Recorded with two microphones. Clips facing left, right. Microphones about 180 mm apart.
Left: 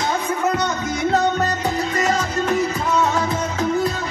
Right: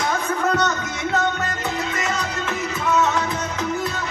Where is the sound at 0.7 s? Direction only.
35° left (ahead or behind).